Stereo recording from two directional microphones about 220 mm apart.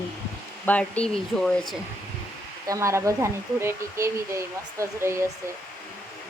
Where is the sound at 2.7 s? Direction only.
15° right (ahead or behind).